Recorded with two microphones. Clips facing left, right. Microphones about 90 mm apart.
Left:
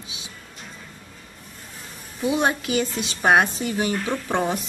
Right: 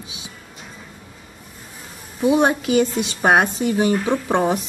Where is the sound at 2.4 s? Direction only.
20° right (ahead or behind).